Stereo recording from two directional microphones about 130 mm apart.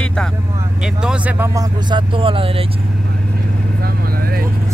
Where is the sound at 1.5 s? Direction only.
30° right (ahead or behind).